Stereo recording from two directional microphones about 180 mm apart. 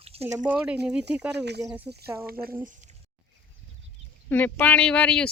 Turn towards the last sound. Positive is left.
turn(degrees=5)  # may be behind; listen again after turning